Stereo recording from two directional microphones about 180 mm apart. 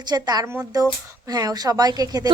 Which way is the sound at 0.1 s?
20° right (ahead or behind).